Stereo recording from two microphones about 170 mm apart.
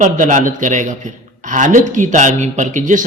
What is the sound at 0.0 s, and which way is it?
A man's voice, 45° right (ahead or behind).